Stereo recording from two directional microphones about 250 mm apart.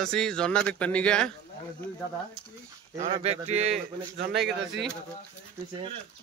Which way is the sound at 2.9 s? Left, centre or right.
Right.